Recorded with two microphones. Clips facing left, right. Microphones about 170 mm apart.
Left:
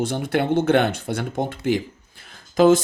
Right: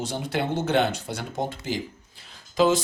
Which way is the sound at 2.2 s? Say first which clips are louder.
Left 5 dB; 50° left (ahead or behind).